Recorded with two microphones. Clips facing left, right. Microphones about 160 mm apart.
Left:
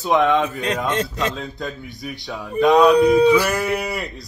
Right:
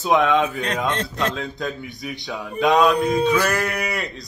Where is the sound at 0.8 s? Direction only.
5° left (ahead or behind).